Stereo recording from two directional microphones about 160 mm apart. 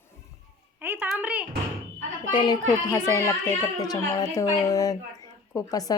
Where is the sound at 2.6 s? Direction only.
15° left (ahead or behind).